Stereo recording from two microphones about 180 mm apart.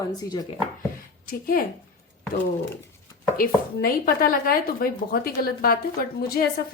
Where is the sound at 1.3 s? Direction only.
55° left (ahead or behind).